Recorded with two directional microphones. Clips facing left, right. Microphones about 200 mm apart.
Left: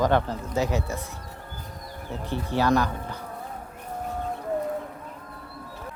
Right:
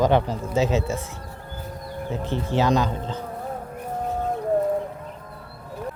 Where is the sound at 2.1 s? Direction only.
20° right (ahead or behind).